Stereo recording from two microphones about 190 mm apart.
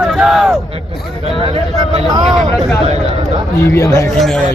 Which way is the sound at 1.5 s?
30° right (ahead or behind).